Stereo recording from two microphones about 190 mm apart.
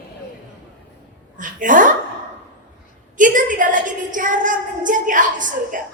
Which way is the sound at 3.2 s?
45° right (ahead or behind).